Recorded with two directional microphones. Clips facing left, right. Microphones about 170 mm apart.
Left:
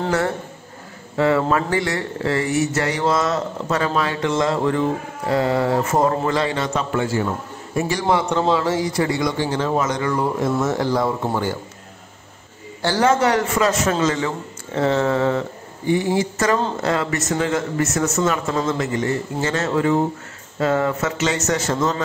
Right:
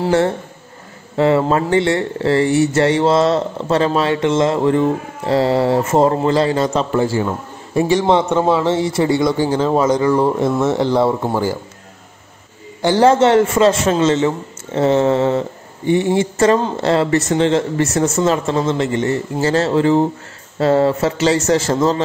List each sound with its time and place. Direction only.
1.1 s speech: 25° right (ahead or behind)
12.8 s a man's voice: 25° right (ahead or behind)